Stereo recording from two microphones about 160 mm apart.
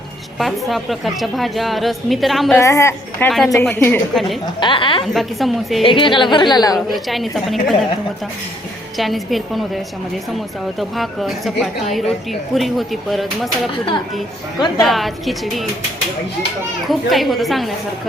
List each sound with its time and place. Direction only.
0.7 s a woman's voice: centre (ahead or behind)
2.6 s a woman's voice: 20° left (ahead or behind)
3.2 s a woman's voice: centre (ahead or behind)
4.6 s a woman's voice: 30° left (ahead or behind)
5.0 s a woman's voice: centre (ahead or behind)
5.8 s a woman's voice: 30° left (ahead or behind)
6.7 s a woman's voice: centre (ahead or behind)
9.0 s a woman's voice: centre (ahead or behind)
14.8 s a woman's voice: centre (ahead or behind)
16.9 s a woman's voice: centre (ahead or behind)